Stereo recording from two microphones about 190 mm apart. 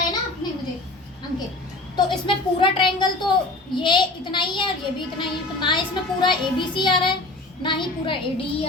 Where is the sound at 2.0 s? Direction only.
25° left (ahead or behind).